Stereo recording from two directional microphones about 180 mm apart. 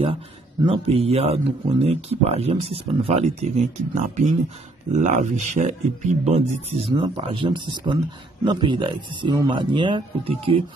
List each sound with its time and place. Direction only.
0.7 s a man's voice: 35° right (ahead or behind)